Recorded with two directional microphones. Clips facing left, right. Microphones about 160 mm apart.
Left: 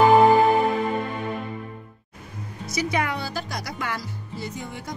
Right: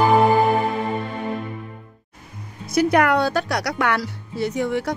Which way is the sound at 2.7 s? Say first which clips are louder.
Right 9 dB; 60° right (ahead or behind).